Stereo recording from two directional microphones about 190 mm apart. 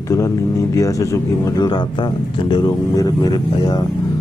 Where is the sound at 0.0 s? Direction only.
15° left (ahead or behind).